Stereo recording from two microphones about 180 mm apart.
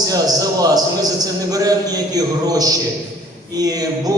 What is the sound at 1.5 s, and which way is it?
A man's voice, 20° right (ahead or behind).